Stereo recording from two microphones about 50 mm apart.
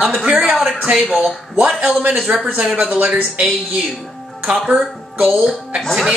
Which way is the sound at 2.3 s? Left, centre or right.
Right.